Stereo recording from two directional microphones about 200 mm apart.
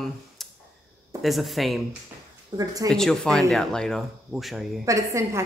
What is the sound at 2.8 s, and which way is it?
Speech, centre (ahead or behind).